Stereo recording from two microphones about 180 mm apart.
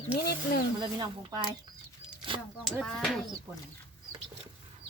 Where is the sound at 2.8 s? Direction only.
Centre (ahead or behind).